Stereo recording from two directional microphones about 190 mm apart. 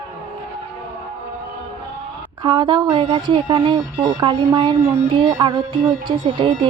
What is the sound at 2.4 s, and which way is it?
Speech, 25° right (ahead or behind).